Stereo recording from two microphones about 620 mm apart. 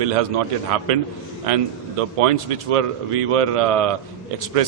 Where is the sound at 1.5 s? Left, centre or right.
Right.